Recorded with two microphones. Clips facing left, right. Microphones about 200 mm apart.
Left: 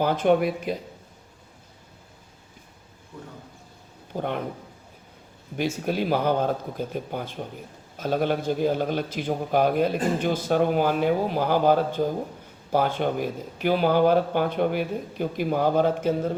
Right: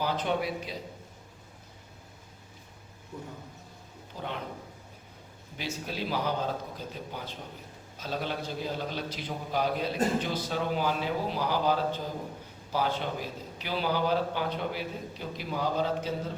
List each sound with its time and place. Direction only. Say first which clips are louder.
0.0 s a man's voice: left 9 dB; 55° left (ahead or behind)
4.1 s speech: left 9 dB; 55° left (ahead or behind)
5.5 s a man's voice: left 10 dB; 50° left (ahead or behind)